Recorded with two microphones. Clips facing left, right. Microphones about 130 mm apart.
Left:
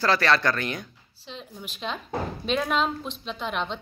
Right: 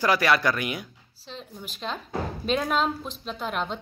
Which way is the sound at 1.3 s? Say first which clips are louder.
Even; centre (ahead or behind).